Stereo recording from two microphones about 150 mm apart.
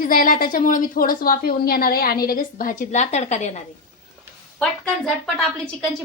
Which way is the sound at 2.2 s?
70° left (ahead or behind).